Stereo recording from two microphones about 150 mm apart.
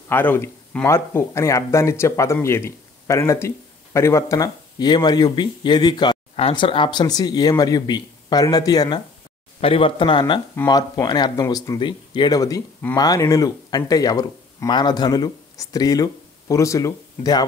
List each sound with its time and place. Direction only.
0.1 s speech: 15° left (ahead or behind)
9.6 s speech: 40° left (ahead or behind)